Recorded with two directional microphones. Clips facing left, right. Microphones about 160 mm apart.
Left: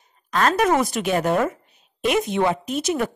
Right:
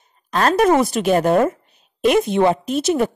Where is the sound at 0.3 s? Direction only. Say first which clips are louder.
Right 4 dB; 30° right (ahead or behind).